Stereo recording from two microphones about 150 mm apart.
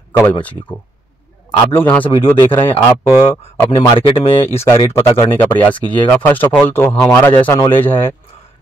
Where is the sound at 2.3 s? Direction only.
35° left (ahead or behind).